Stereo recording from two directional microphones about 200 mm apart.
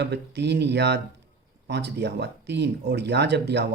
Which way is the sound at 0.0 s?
55° right (ahead or behind).